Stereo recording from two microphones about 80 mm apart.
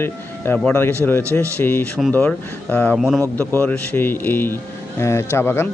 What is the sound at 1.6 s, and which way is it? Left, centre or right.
Speech, left.